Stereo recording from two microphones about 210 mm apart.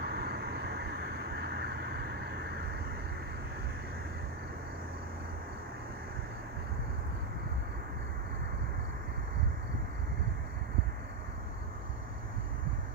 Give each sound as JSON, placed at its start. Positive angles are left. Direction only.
{"t": 0.0, "sound": "vehicle", "side_deg": -50}